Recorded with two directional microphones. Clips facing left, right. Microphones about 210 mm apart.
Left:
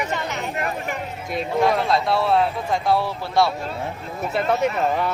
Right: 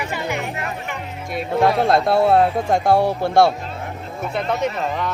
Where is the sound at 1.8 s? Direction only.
50° right (ahead or behind).